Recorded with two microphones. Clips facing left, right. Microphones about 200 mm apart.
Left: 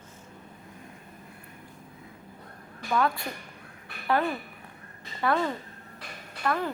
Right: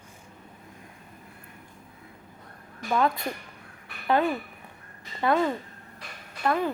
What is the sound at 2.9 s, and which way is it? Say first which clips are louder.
Speech: right 2 dB; 20° right (ahead or behind).